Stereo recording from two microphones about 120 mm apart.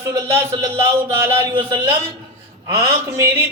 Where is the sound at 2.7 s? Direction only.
20° right (ahead or behind).